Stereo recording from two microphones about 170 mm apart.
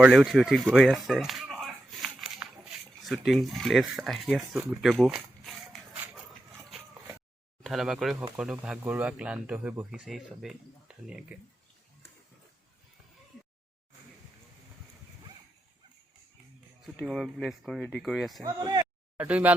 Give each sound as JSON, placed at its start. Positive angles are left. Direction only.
{"t": 0.0, "sound": "a sound", "side_deg": 0}
{"t": 3.0, "sound": "speech", "side_deg": 0}
{"t": 7.6, "sound": "speech", "side_deg": 0}
{"t": 16.8, "sound": "speech", "side_deg": 0}
{"t": 18.4, "sound": "speech", "side_deg": -25}
{"t": 19.1, "sound": "speech", "side_deg": -10}